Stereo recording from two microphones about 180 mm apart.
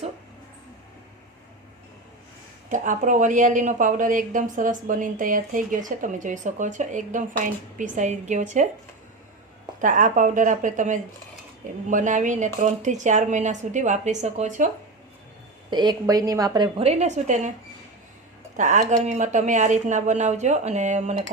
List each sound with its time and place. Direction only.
2.6 s speech: 45° right (ahead or behind)
9.8 s speech: 45° right (ahead or behind)
15.7 s a woman's voice: 25° right (ahead or behind); by 17.5 s 40° right (ahead or behind)
18.5 s speech: 45° right (ahead or behind)